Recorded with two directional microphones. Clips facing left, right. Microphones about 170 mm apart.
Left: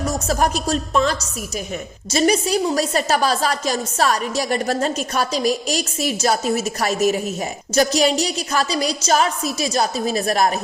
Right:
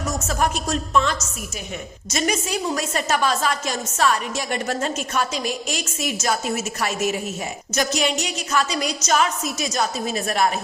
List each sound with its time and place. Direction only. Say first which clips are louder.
0.1 s a woman's voice: left 2 dB; 35° left (ahead or behind)